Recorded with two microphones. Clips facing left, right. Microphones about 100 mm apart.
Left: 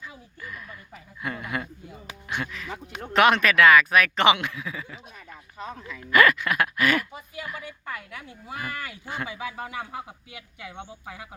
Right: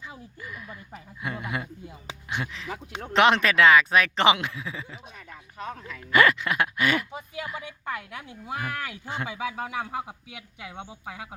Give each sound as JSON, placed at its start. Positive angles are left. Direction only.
{"t": 0.1, "sound": "speech", "side_deg": -20}
{"t": 5.5, "sound": "speech", "side_deg": 0}
{"t": 6.1, "sound": "speech", "side_deg": -25}